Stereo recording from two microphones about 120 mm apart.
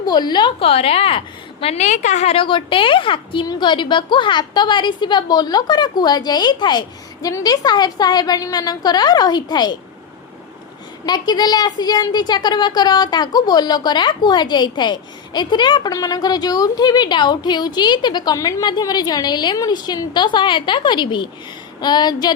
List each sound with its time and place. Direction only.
0.0 s a woman's voice: 35° left (ahead or behind); by 1.2 s 50° left (ahead or behind)
1.6 s a woman's voice: 70° left (ahead or behind)
2.4 s a woman's voice: 45° left (ahead or behind)
11.0 s a woman's voice: 35° left (ahead or behind)